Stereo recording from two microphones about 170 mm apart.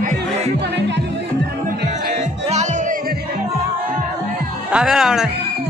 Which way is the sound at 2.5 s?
40° right (ahead or behind).